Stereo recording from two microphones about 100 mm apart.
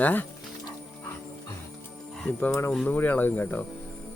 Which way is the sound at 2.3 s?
15° left (ahead or behind).